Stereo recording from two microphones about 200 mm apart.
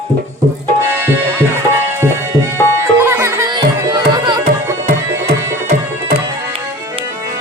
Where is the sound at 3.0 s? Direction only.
15° right (ahead or behind).